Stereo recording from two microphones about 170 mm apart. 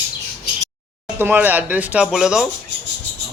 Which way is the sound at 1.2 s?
10° right (ahead or behind).